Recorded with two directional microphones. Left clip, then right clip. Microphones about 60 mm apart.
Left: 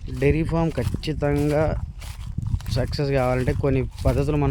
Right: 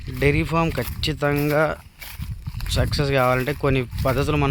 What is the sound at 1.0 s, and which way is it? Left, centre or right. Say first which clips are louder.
Speech: right 2 dB; left.